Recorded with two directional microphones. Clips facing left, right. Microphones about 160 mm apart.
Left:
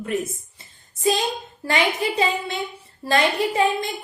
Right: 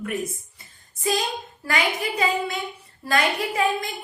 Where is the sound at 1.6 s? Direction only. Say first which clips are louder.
Left 3 dB; 25° left (ahead or behind).